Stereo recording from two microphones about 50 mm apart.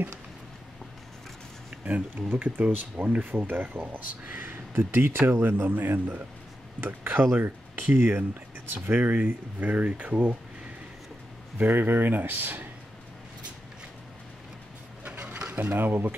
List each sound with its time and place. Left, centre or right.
1.9 s speech: right
2.2 s speech: right
2.6 s speech: right
11.5 s speech: right
15.0 s a sound: right
15.7 s speech: right